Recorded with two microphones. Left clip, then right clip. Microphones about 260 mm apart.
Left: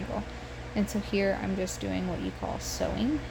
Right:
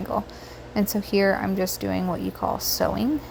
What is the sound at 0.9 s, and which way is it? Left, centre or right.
Speech, right.